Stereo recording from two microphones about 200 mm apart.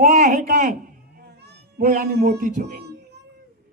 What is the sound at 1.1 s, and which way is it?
Meow, 50° right (ahead or behind).